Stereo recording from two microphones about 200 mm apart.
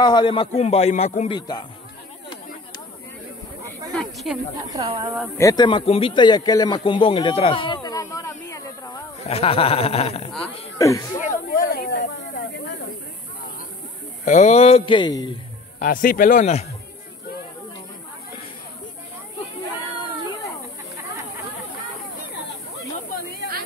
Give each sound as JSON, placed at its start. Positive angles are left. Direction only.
{"t": 0.0, "sound": "a man's voice", "side_deg": 25}
{"t": 1.3, "sound": "a man's voice", "side_deg": 20}
{"t": 4.0, "sound": "speech", "side_deg": 0}
{"t": 4.6, "sound": "a woman's voice", "side_deg": -25}
{"t": 5.4, "sound": "speech", "side_deg": 20}
{"t": 9.3, "sound": "a man's voice", "side_deg": 30}
{"t": 10.8, "sound": "speech", "side_deg": 15}
{"t": 11.1, "sound": "a sound", "side_deg": 40}
{"t": 14.2, "sound": "a man's voice", "side_deg": 35}
{"t": 15.8, "sound": "speech", "side_deg": 45}